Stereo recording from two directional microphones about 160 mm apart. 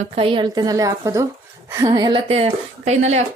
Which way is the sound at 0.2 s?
30° right (ahead or behind).